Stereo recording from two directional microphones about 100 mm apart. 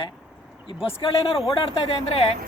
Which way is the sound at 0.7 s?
65° left (ahead or behind).